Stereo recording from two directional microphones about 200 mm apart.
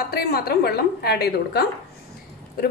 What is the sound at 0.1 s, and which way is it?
A woman's voice, 50° left (ahead or behind).